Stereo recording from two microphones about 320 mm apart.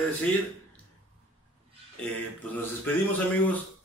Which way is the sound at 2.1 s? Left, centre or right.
Centre.